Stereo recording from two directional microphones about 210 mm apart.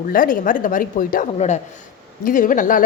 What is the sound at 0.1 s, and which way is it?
A woman's voice, 40° left (ahead or behind).